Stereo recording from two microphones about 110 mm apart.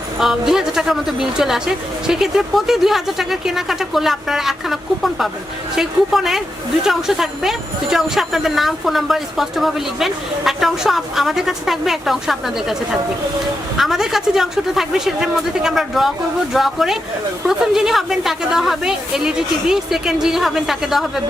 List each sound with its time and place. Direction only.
0.2 s speech: 5° right (ahead or behind)